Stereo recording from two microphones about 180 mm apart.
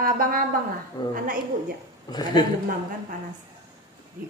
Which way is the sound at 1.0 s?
25° left (ahead or behind).